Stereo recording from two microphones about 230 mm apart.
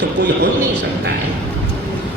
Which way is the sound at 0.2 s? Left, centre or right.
Right.